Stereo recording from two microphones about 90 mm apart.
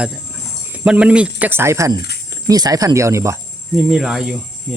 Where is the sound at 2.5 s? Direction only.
45° right (ahead or behind).